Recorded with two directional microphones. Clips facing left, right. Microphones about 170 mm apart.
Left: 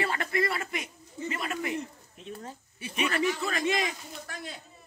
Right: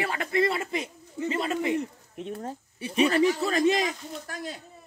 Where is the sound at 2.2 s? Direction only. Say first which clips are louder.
Right 7 dB; 60° right (ahead or behind).